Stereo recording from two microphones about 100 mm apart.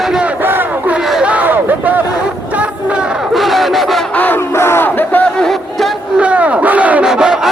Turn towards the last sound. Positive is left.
turn(degrees=-5)  # may be behind; listen again after turning